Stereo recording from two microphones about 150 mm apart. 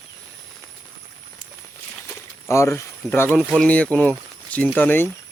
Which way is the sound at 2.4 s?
20° left (ahead or behind).